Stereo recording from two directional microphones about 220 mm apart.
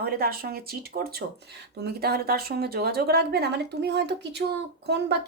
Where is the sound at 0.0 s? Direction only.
45° right (ahead or behind).